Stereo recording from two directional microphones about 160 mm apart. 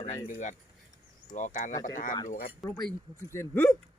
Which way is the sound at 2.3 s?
65° left (ahead or behind).